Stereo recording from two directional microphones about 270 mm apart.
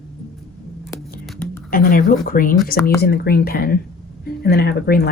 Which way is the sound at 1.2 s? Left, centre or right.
Centre.